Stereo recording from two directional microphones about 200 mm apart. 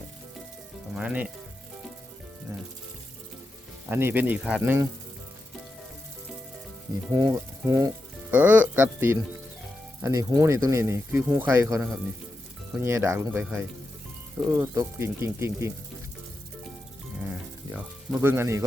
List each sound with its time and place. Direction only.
0.9 s speech: 5° right (ahead or behind)
3.8 s speech: 10° right (ahead or behind)
7.1 s speech: 20° right (ahead or behind)
14.6 s speech: 15° right (ahead or behind)
17.7 s speech: 10° right (ahead or behind)